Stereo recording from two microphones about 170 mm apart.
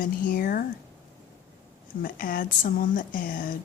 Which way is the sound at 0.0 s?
55° left (ahead or behind).